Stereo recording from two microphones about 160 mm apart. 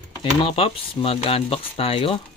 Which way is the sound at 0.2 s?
35° left (ahead or behind).